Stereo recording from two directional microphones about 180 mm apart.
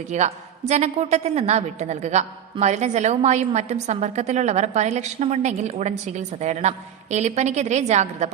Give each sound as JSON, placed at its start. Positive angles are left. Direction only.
{"t": 0.1, "sound": "a woman's voice", "side_deg": -40}